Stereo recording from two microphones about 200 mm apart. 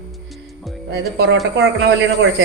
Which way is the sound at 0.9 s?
55° right (ahead or behind).